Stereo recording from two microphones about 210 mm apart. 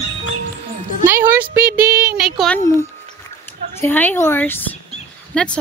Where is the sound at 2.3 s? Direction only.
5° left (ahead or behind).